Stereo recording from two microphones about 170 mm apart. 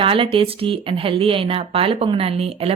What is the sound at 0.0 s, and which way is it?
Speech, 30° right (ahead or behind).